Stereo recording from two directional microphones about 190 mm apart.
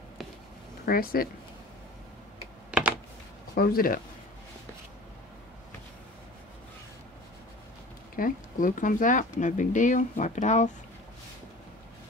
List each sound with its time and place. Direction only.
0.8 s speech: 50° left (ahead or behind)
2.7 s a sound: 5° right (ahead or behind)
3.5 s speech: 50° left (ahead or behind)
8.2 s speech: 45° left (ahead or behind)